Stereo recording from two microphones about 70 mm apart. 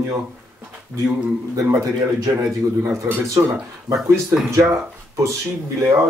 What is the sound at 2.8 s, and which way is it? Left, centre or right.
Speech, right.